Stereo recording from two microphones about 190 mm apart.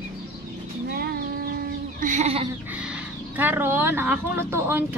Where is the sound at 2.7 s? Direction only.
5° right (ahead or behind).